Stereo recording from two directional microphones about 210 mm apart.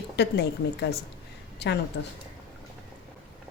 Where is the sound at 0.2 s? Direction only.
50° left (ahead or behind).